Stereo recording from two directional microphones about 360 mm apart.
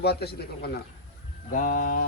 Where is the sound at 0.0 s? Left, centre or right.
Left.